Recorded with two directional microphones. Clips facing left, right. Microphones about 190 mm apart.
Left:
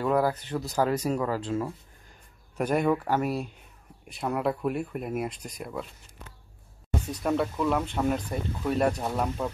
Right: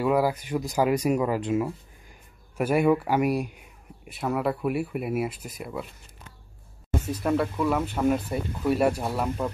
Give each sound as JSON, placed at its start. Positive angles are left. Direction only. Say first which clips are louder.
{"t": 0.0, "sound": "speech", "louder": "right 2 dB", "side_deg": -10}
{"t": 4.1, "sound": "speech", "louder": "right 1 dB", "side_deg": 0}
{"t": 7.1, "sound": "speech", "louder": "right 2 dB", "side_deg": 0}